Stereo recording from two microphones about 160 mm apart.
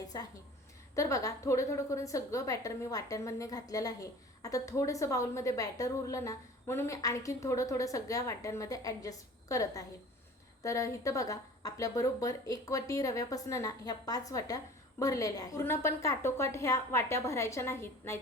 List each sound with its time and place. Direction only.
0.1 s a woman's voice: 25° left (ahead or behind)